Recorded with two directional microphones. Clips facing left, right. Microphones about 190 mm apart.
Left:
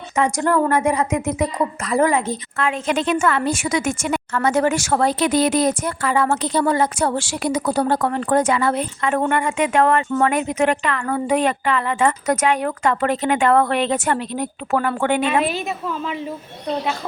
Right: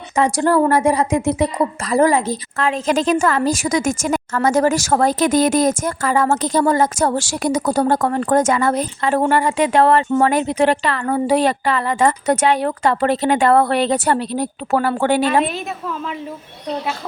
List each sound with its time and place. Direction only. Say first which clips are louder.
0.2 s a woman's voice: right 3 dB; 30° right (ahead or behind)
15.4 s a woman's voice: left 1 dB; centre (ahead or behind)